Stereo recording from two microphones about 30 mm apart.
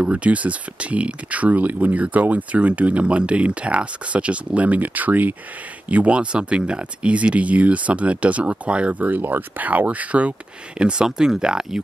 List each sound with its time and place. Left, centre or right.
0.0 s speech: right
2.0 s speech: right
4.6 s speech: right
5.9 s speech: right
8.9 s speech: right
10.8 s speech: right